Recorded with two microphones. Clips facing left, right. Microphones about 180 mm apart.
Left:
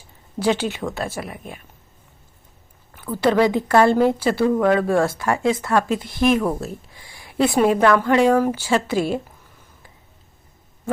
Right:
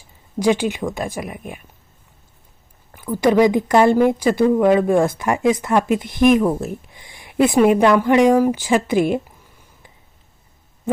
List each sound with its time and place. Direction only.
0.3 s speech: 15° right (ahead or behind)
3.0 s speech: 15° right (ahead or behind)